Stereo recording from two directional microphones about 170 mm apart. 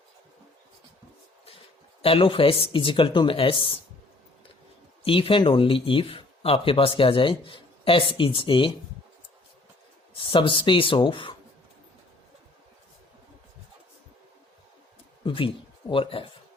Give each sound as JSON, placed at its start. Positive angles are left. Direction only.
{"t": 2.0, "sound": "speech", "side_deg": 30}
{"t": 5.0, "sound": "speech", "side_deg": 30}
{"t": 10.2, "sound": "speech", "side_deg": 30}
{"t": 15.2, "sound": "speech", "side_deg": 30}